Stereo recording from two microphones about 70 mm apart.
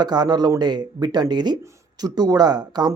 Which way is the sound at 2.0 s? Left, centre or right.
Right.